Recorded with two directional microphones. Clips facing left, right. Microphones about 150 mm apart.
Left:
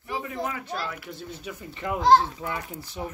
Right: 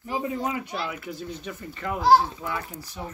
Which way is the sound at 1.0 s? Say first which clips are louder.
Right 3 dB; centre (ahead or behind).